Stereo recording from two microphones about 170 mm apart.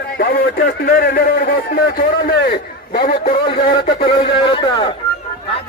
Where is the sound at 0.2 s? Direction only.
70° left (ahead or behind).